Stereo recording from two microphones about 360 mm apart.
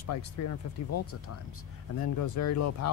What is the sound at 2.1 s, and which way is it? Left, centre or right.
Speech, left.